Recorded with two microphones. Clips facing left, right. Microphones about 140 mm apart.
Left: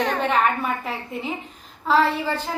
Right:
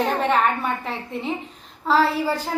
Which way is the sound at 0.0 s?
Centre (ahead or behind).